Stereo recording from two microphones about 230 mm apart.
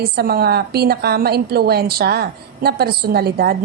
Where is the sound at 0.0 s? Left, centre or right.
Right.